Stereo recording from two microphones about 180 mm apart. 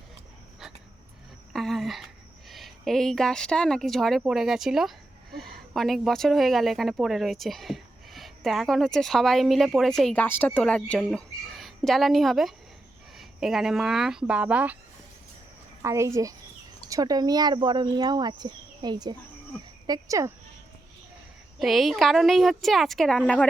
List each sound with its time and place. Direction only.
1.5 s a sound: centre (ahead or behind)
2.5 s a woman's voice: centre (ahead or behind)
15.8 s speech: 15° right (ahead or behind)
21.6 s a woman's voice: centre (ahead or behind)